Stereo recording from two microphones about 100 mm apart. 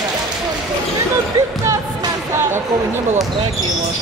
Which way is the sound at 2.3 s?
25° right (ahead or behind).